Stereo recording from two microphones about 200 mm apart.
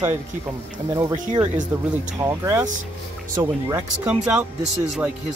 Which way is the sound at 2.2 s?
15° right (ahead or behind).